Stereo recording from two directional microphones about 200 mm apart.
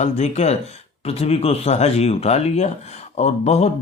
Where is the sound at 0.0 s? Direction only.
35° left (ahead or behind).